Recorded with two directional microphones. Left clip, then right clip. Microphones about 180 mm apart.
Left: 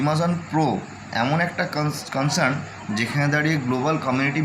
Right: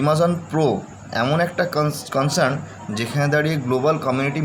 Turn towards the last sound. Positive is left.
turn(degrees=-50)  # may be behind; listen again after turning